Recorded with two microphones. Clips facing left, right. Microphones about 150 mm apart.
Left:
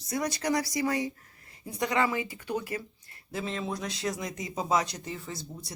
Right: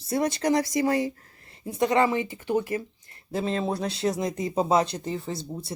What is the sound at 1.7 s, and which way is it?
Speech, 25° right (ahead or behind).